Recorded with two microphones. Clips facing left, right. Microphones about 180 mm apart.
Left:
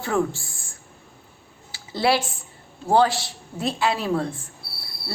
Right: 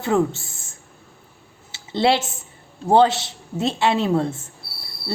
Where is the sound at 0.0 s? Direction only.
20° right (ahead or behind).